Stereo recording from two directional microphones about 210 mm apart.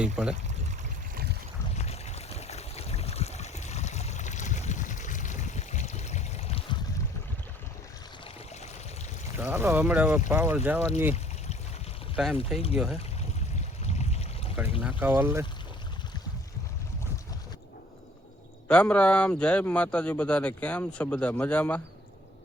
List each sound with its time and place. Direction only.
0.0 s speech: 5° right (ahead or behind)
1.1 s boat: 50° right (ahead or behind)
1.7 s a sound: 30° left (ahead or behind)
9.4 s speech: 10° right (ahead or behind)
12.1 s speech: 5° right (ahead or behind)
13.8 s boat: 30° left (ahead or behind)
14.8 s speech: 5° right (ahead or behind)
18.7 s speech: 5° left (ahead or behind)